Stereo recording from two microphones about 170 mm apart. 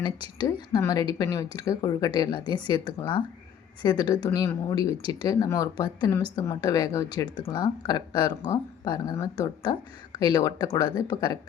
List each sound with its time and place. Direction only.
0.3 s speech: 20° left (ahead or behind)